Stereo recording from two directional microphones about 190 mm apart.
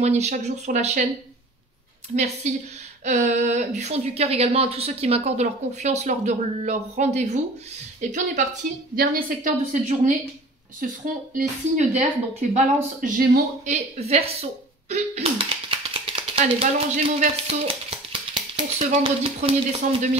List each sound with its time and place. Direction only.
0.0 s speech: 35° right (ahead or behind)
2.1 s speech: 35° right (ahead or behind)
8.9 s a woman's voice: 50° right (ahead or behind); by 20.1 s 35° right (ahead or behind)